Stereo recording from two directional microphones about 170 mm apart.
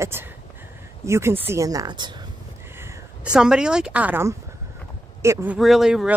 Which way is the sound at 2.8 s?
5° right (ahead or behind).